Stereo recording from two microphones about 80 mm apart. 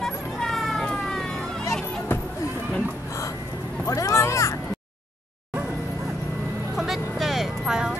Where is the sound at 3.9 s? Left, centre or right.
Left.